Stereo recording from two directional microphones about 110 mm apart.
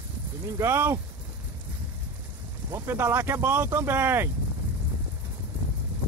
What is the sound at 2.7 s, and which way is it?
Speech, 20° right (ahead or behind).